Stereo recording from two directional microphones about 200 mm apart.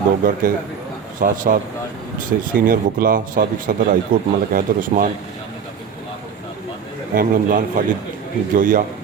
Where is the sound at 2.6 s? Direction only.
45° right (ahead or behind).